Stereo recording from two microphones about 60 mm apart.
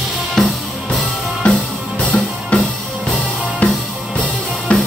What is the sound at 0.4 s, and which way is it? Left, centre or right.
Music, centre.